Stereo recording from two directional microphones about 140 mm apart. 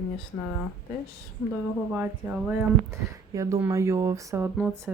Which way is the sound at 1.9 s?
10° right (ahead or behind).